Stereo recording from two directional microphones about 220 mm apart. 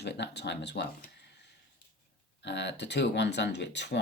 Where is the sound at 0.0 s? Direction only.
50° left (ahead or behind).